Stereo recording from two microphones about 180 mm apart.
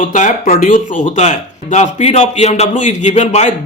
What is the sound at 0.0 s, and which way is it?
Speech, 45° left (ahead or behind).